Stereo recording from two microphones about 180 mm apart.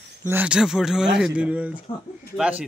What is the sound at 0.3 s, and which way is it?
Speech, 5° right (ahead or behind).